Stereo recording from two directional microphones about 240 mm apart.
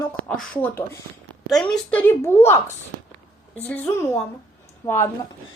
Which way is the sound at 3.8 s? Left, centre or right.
Centre.